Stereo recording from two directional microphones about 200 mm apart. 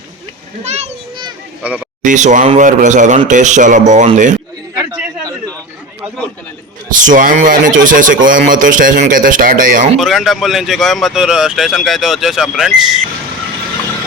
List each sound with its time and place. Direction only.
0.6 s speech: 35° right (ahead or behind)
1.6 s a man's voice: 5° right (ahead or behind)
2.0 s speech: 40° right (ahead or behind)
7.0 s speech: 40° right (ahead or behind)
10.0 s speech: centre (ahead or behind)